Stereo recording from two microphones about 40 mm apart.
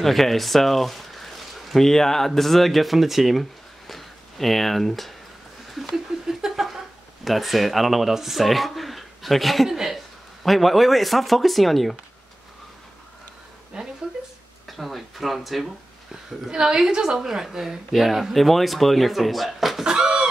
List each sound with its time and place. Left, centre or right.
0.0 s speech: centre
5.7 s a sound: centre
7.2 s a woman's voice: centre
13.7 s speech: right
14.7 s a woman's voice: centre
16.4 s a woman's voice: centre
19.8 s chicken: right